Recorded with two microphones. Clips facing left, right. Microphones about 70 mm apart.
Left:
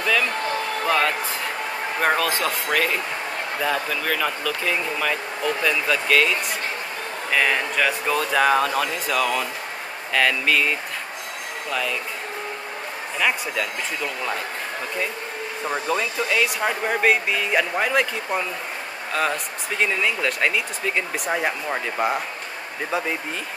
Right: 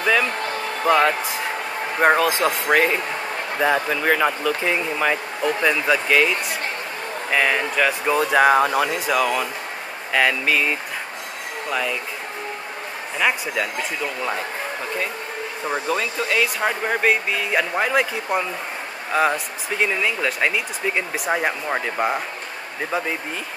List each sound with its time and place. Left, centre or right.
0.0 s basketball bounce: centre
0.8 s speech: right
13.2 s speech: centre
15.6 s speech: centre
21.6 s speech: centre
22.8 s speech: centre